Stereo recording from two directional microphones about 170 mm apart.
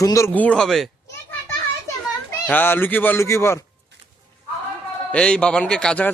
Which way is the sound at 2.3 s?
10° left (ahead or behind).